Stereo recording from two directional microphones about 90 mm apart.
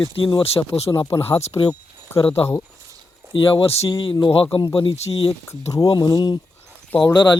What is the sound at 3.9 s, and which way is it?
Speech, 70° left (ahead or behind).